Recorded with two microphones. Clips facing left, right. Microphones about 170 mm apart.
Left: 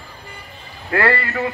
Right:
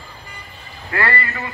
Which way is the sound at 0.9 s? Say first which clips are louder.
Left 4 dB; 65° left (ahead or behind).